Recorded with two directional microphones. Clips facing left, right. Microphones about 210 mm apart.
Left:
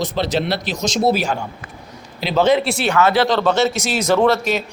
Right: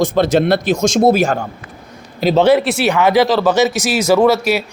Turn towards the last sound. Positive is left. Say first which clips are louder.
# right 4 dB
turn(degrees=-10)  # may be behind; listen again after turning